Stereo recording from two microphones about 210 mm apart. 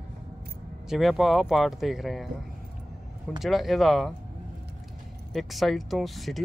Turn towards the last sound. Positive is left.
turn(degrees=0)  # may be behind; listen again after turning